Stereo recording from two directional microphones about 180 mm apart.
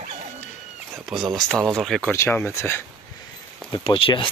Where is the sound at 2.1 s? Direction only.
15° left (ahead or behind).